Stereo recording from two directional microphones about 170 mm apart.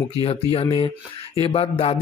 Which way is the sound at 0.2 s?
35° left (ahead or behind).